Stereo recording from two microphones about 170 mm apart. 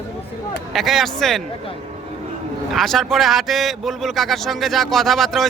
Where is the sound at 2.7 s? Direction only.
Centre (ahead or behind).